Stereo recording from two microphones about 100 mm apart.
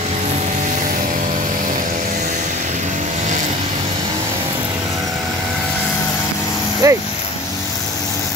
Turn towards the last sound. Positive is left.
turn(degrees=-35)  # may be behind; listen again after turning